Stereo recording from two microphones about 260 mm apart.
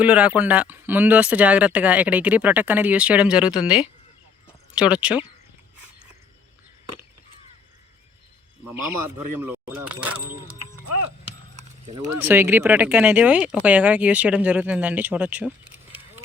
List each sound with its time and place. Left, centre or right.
0.0 s speech: centre
8.7 s speech: centre
12.2 s speech: centre